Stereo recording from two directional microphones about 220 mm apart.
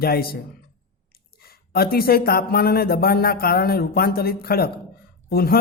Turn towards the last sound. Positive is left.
turn(degrees=45)  # may be behind; listen again after turning